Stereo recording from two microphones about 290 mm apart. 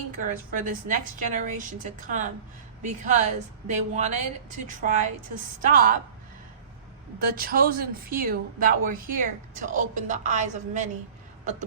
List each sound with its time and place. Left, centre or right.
0.2 s speech: right
7.3 s speech: right